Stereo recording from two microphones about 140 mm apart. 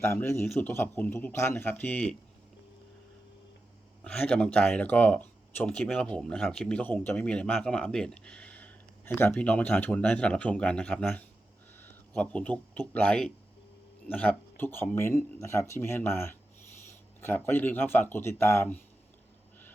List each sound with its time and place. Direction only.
0.0 s speech: 15° left (ahead or behind)
4.0 s speech: 5° left (ahead or behind)
11.8 s a sound: 10° left (ahead or behind)
12.9 s speech: 10° left (ahead or behind)